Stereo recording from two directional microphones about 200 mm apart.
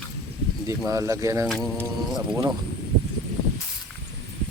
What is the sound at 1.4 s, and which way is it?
Speech, centre (ahead or behind).